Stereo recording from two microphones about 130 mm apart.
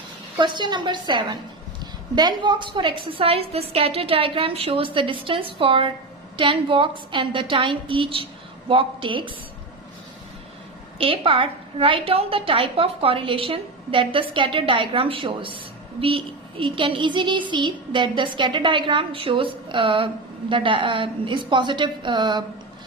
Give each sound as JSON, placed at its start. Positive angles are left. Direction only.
{"t": 0.3, "sound": "a woman's voice", "side_deg": -35}
{"t": 10.9, "sound": "a woman's voice", "side_deg": -45}